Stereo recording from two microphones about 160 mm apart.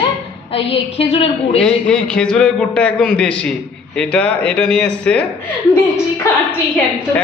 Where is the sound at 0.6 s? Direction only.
35° left (ahead or behind).